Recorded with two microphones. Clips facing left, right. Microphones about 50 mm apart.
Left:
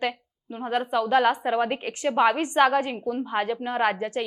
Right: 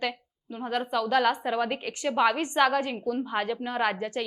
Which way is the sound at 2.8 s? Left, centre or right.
Centre.